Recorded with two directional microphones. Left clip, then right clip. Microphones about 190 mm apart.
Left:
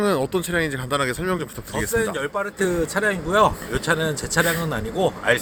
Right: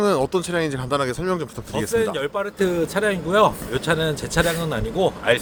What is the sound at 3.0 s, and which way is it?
A man's voice, 5° left (ahead or behind).